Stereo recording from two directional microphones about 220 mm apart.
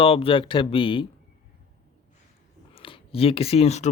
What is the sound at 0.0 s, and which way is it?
Speech, 25° left (ahead or behind).